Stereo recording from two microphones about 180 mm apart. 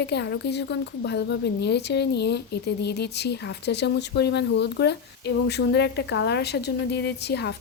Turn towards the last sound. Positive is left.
turn(degrees=65)  # may be behind; listen again after turning